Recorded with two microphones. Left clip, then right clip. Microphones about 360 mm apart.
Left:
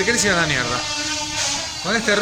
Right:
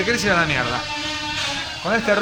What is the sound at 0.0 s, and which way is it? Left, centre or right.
Speech, centre.